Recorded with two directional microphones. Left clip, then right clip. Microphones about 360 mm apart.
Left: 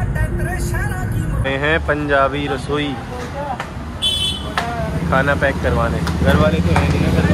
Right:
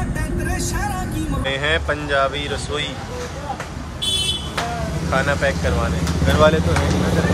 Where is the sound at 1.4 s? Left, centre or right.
Centre.